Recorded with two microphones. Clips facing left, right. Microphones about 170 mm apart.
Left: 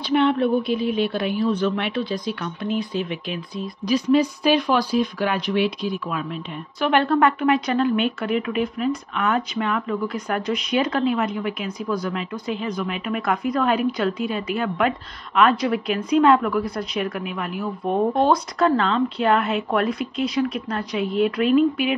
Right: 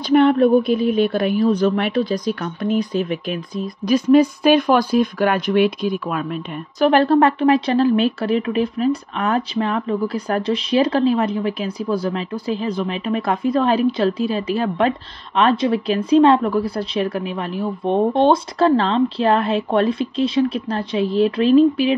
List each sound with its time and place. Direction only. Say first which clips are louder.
0.1 s a woman's voice: right 6 dB; 45° right (ahead or behind)
6.9 s a woman's voice: right 3 dB; 35° right (ahead or behind)